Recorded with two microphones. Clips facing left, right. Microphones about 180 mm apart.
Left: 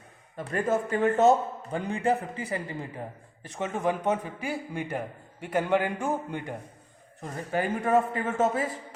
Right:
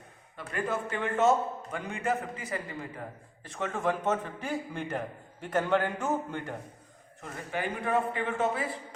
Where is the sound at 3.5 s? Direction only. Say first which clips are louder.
Left 2 dB; 20° left (ahead or behind).